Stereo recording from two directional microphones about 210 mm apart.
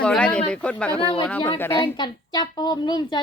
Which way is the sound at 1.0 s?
20° left (ahead or behind).